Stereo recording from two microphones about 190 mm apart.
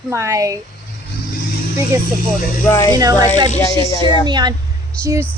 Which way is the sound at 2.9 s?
20° right (ahead or behind).